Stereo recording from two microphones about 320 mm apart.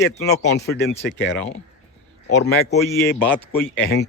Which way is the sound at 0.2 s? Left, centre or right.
Centre.